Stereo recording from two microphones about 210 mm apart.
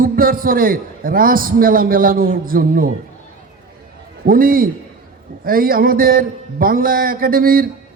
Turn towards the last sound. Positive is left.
turn(degrees=-45)  # may be behind; listen again after turning